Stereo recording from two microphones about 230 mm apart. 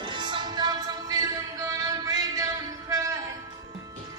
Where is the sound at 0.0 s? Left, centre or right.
Right.